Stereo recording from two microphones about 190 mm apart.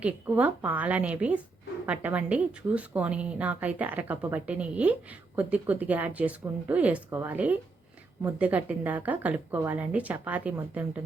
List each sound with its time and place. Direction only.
0.0 s a woman's voice: 10° right (ahead or behind)